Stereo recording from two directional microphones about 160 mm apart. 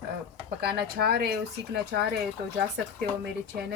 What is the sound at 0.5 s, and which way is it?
Speech, 80° right.